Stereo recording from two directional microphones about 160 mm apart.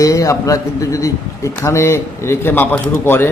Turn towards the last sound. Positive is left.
turn(degrees=15)  # may be behind; listen again after turning